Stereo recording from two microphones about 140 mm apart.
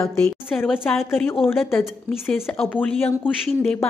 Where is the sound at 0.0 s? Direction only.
15° left (ahead or behind).